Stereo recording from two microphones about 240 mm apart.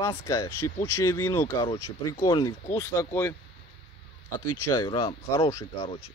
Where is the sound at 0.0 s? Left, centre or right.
Centre.